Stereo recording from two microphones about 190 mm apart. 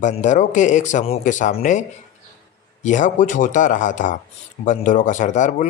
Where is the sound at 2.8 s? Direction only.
40° left (ahead or behind).